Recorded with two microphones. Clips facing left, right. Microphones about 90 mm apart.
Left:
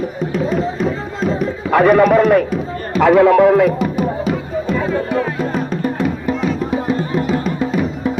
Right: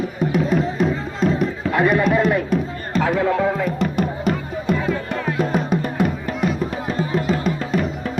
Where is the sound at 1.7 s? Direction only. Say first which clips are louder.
Left 8 dB; 65° left (ahead or behind).